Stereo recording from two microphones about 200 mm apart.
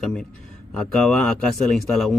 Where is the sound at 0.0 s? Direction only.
5° left (ahead or behind).